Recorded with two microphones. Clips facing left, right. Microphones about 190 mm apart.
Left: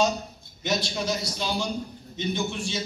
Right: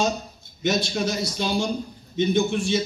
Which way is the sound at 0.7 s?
50° right (ahead or behind).